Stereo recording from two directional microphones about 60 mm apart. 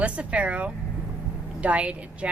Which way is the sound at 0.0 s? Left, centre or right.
Right.